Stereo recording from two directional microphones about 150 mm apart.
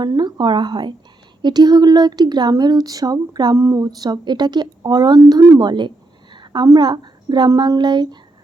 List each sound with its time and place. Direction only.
0.0 s a woman's voice: 30° right (ahead or behind)